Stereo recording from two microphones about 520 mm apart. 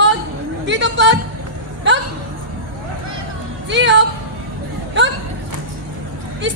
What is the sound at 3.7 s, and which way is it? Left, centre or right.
Speech, right.